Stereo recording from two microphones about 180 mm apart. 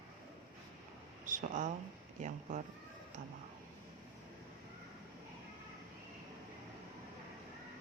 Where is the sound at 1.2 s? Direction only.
45° right (ahead or behind).